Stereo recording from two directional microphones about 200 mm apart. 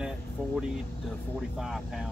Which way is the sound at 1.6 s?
Centre (ahead or behind).